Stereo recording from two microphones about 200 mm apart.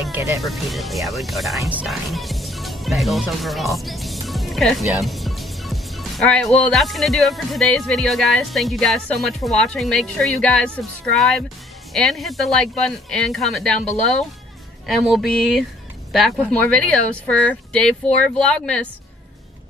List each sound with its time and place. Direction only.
0.4 s speech: centre (ahead or behind)
14.9 s speech: centre (ahead or behind)